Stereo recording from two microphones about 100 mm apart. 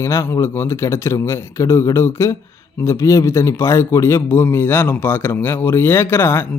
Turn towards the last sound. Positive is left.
turn(degrees=20)  # may be behind; listen again after turning